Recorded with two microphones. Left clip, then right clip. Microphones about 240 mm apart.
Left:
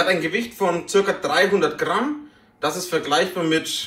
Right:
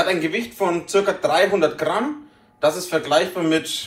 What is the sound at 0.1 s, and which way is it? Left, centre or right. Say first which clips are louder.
Speech: left 1 dB; centre.